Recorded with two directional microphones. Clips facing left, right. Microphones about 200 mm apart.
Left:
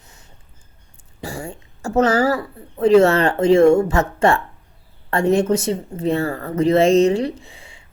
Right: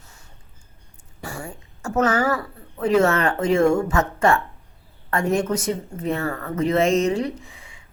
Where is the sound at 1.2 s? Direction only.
25° left (ahead or behind).